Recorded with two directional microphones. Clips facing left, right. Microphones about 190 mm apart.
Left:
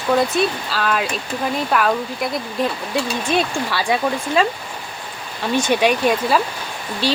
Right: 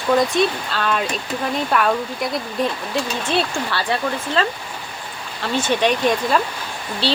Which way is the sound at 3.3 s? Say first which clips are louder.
Left 1 dB; 15° left (ahead or behind).